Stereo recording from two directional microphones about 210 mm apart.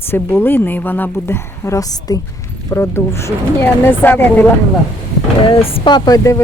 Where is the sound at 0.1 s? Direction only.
10° left (ahead or behind).